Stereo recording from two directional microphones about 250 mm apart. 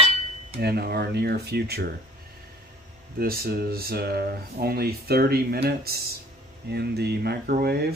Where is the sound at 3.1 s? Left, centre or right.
Right.